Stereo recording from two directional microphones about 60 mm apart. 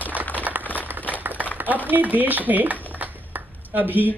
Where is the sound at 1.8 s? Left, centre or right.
Right.